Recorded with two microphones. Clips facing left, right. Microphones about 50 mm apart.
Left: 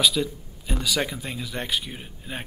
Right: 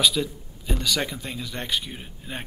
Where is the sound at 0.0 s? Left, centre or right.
Centre.